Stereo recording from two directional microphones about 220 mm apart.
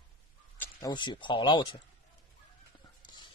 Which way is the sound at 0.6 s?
20° left (ahead or behind).